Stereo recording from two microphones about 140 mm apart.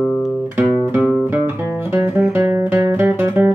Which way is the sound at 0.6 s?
15° right (ahead or behind).